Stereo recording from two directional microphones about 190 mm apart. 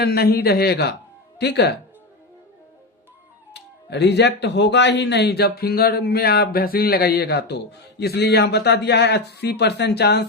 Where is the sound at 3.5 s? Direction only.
65° left (ahead or behind).